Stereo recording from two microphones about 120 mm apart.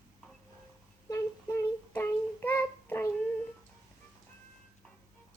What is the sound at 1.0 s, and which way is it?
Humming, 25° left (ahead or behind).